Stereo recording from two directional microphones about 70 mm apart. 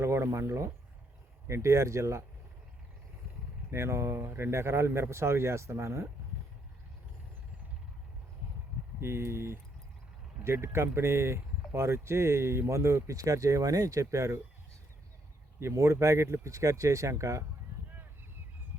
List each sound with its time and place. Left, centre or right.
0.0 s speech: right
3.7 s speech: right
9.0 s speech: right
15.6 s speech: right